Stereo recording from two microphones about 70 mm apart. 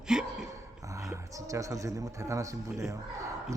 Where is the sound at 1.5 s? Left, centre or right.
Right.